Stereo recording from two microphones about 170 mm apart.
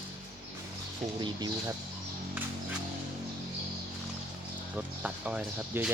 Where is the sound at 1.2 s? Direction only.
25° right (ahead or behind).